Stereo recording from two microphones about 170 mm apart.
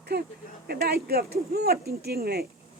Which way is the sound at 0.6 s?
65° right (ahead or behind).